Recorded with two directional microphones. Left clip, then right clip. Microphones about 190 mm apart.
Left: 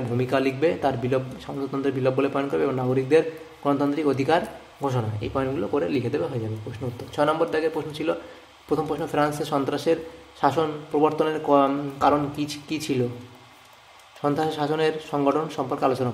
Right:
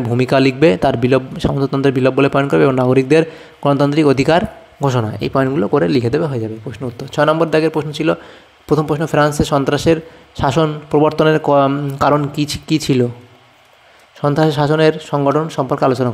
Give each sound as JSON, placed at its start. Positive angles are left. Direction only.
{"t": 0.2, "sound": "a man's voice", "side_deg": -45}
{"t": 14.2, "sound": "a man's voice", "side_deg": -40}